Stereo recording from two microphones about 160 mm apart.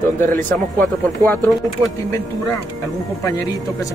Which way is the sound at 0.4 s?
10° left (ahead or behind).